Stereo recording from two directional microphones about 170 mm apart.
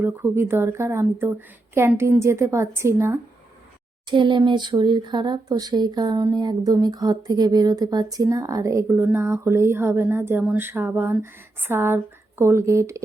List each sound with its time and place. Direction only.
0.0 s speech: 15° right (ahead or behind)
4.1 s speech: 30° right (ahead or behind)